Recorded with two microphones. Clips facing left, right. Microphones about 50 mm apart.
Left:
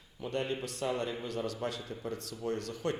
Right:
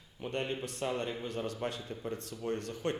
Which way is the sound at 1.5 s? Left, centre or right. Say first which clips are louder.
Even; right.